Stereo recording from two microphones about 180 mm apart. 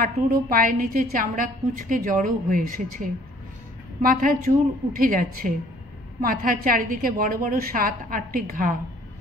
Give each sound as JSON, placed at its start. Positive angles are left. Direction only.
{"t": 0.0, "sound": "a woman's voice", "side_deg": -50}